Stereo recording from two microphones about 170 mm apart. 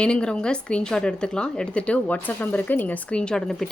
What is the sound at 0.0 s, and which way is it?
A woman's voice, 5° left (ahead or behind).